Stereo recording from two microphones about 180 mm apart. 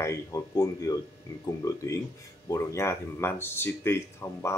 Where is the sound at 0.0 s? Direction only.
20° left (ahead or behind).